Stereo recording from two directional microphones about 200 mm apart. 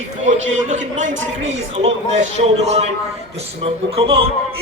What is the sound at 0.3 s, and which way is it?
A man's voice, 35° right (ahead or behind).